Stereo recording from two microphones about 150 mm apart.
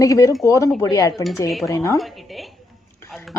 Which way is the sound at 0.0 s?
20° left (ahead or behind).